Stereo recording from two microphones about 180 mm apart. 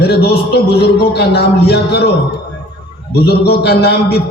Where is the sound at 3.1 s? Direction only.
60° left (ahead or behind).